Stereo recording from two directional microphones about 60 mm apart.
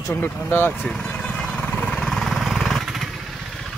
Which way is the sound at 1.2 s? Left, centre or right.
Centre.